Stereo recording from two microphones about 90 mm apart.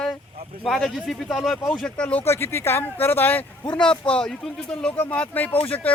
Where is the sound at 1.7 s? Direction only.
10° left (ahead or behind).